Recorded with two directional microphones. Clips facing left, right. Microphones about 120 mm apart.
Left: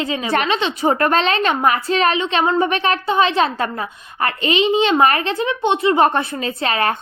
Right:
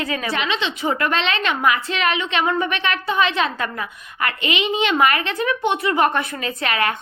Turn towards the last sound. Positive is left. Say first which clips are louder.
# left 3 dB
turn(degrees=30)  # may be behind; listen again after turning